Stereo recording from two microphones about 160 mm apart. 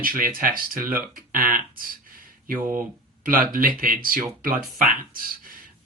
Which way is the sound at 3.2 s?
60° right (ahead or behind).